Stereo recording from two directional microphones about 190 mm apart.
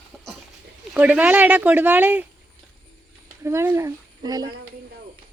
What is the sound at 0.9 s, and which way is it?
Speech, 10° right (ahead or behind).